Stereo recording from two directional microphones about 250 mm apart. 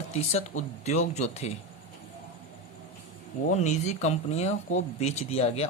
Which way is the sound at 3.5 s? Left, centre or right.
Left.